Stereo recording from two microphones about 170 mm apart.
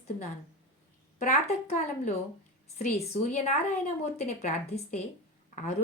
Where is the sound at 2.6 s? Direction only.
40° left (ahead or behind).